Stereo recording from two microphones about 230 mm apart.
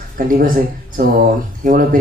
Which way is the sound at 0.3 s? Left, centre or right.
Right.